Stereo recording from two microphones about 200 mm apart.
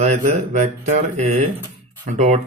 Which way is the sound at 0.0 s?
35° right (ahead or behind).